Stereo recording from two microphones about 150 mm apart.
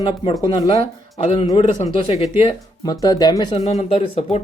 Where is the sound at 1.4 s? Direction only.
25° left (ahead or behind).